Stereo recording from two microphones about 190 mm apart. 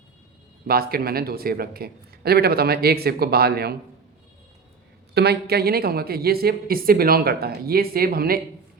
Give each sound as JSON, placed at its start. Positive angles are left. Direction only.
{"t": 0.7, "sound": "a woman's voice", "side_deg": -50}
{"t": 5.1, "sound": "a woman's voice", "side_deg": -60}